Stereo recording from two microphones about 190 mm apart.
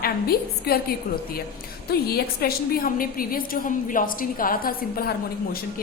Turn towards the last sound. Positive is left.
turn(degrees=50)  # may be behind; listen again after turning